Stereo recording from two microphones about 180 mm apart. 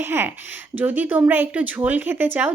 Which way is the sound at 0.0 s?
15° right (ahead or behind).